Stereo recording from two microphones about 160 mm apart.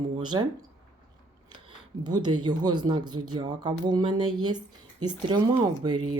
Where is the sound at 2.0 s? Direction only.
25° right (ahead or behind).